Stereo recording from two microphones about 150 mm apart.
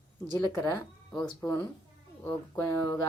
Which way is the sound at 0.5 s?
15° left (ahead or behind).